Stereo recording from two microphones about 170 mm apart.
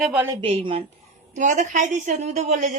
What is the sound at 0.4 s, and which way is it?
Speech, 30° right (ahead or behind).